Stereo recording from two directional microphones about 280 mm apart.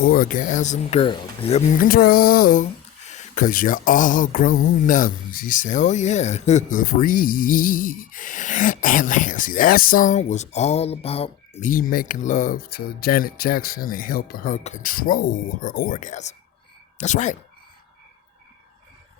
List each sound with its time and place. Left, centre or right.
0.0 s speech: left